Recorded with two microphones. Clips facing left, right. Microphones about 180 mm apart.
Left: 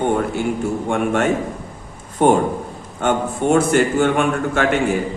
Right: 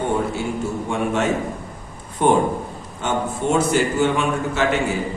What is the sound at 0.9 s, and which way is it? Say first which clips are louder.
A man's voice: left 3 dB; 55° left (ahead or behind).